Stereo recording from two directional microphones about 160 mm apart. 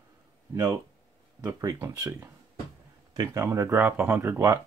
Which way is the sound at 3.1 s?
25° right (ahead or behind).